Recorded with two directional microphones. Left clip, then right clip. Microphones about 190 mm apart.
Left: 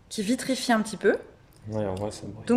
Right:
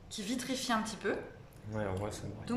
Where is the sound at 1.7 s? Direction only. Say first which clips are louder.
Left 8 dB; 25° left (ahead or behind).